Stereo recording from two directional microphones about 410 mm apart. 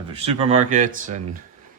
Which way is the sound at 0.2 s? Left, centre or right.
Centre.